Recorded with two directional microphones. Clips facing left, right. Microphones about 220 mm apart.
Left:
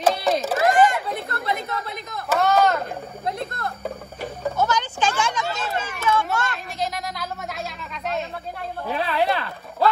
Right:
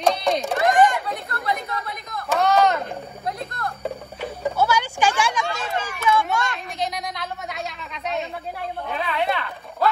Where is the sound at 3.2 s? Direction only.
25° left (ahead or behind).